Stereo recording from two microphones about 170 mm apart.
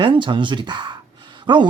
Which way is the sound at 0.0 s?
30° right (ahead or behind).